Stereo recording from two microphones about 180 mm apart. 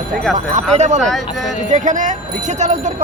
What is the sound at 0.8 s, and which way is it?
Speech, 40° right (ahead or behind).